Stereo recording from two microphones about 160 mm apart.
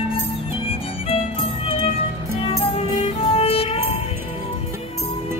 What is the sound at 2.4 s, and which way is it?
Music, 35° left (ahead or behind).